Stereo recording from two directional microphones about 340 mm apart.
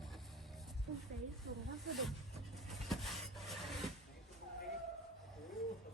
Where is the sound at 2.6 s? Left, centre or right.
Centre.